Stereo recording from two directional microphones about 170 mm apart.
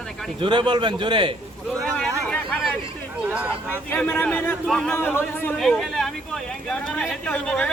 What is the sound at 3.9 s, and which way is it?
A man's voice, 10° left (ahead or behind).